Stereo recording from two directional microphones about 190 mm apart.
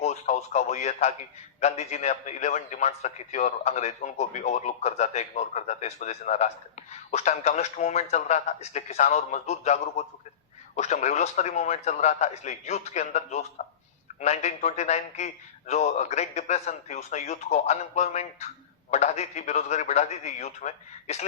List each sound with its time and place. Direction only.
0.0 s a man's voice: 35° left (ahead or behind)